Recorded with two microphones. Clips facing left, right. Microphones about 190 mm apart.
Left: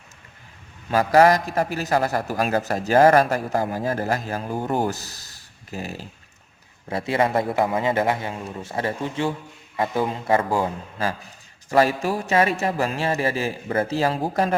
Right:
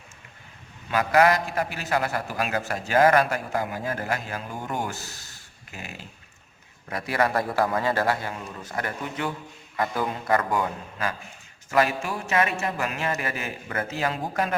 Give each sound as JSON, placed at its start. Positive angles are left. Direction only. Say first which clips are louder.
{"t": 0.9, "sound": "a man's voice", "louder": "left 4 dB", "side_deg": 40}
{"t": 6.9, "sound": "a man's voice", "louder": "left 3 dB", "side_deg": 25}